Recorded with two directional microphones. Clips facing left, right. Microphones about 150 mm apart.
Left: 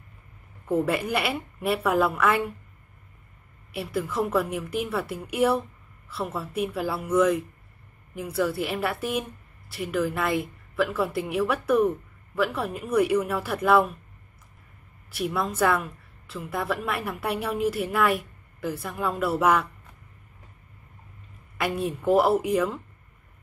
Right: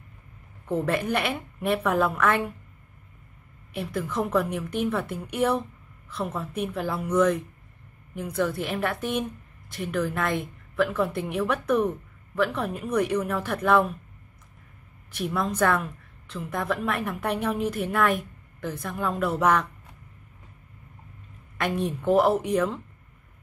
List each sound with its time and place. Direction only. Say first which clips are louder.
0.7 s a woman's voice: left 1 dB; 10° left (ahead or behind)
3.7 s a woman's voice: left 1 dB; 10° left (ahead or behind)
15.0 s a woman's voice: even; 5° left (ahead or behind)
21.5 s a woman's voice: even; 5° left (ahead or behind)